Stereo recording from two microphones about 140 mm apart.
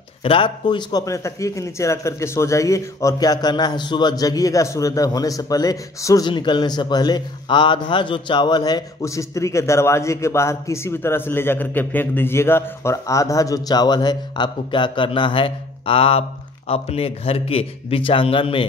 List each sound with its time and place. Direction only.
0.2 s speech: 40° left (ahead or behind)